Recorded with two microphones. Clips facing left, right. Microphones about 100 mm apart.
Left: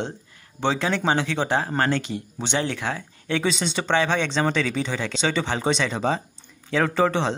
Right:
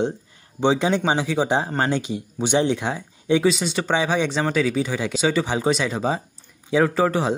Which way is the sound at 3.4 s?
5° right (ahead or behind).